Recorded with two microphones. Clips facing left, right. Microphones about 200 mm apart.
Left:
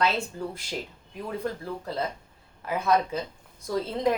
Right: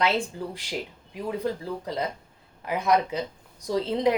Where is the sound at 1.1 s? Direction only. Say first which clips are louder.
Right 3 dB; 15° right (ahead or behind).